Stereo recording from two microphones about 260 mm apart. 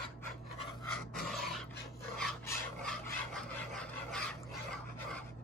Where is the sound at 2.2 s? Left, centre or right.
Centre.